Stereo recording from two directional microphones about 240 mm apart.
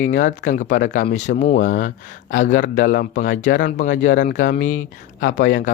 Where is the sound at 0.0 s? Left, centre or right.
Left.